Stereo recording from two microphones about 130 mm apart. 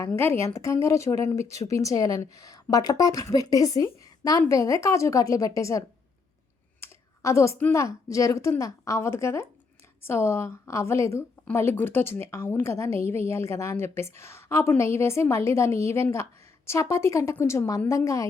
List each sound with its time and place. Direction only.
0.2 s a woman's voice: 20° left (ahead or behind)
6.8 s computer keyboard: 20° left (ahead or behind)
7.7 s a woman's voice: 25° left (ahead or behind)